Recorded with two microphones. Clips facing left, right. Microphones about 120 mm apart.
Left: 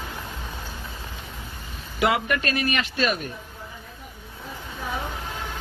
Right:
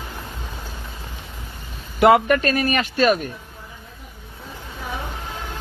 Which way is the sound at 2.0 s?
50° right (ahead or behind).